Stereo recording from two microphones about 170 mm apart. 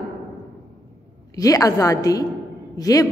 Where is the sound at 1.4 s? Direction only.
20° left (ahead or behind).